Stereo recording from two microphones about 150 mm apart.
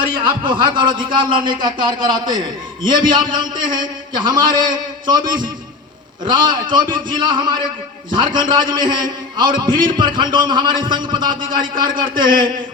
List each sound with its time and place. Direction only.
0.0 s a man's voice: 35° right (ahead or behind)
6.2 s a man's voice: 30° right (ahead or behind)